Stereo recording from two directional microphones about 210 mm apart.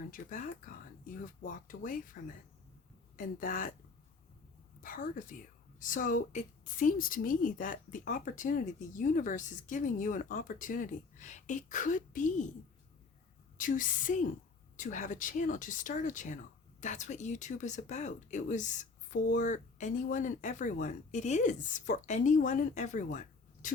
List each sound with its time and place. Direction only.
0.1 s speech: 40° left (ahead or behind)
4.8 s speech: 40° left (ahead or behind)
13.6 s speech: 40° left (ahead or behind)